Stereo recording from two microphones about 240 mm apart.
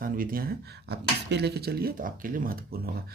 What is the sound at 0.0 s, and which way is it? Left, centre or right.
Speech, right.